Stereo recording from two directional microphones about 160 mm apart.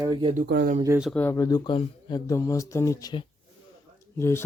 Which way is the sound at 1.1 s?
10° left (ahead or behind).